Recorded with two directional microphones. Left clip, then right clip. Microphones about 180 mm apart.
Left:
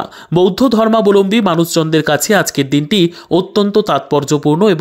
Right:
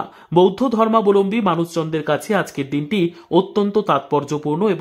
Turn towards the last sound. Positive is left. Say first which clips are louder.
# left 8 dB
turn(degrees=35)  # may be behind; listen again after turning